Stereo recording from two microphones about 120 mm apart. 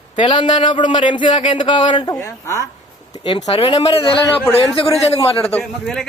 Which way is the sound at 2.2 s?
25° left (ahead or behind).